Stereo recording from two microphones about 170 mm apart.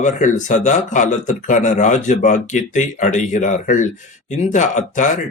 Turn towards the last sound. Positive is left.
turn(degrees=45)  # may be behind; listen again after turning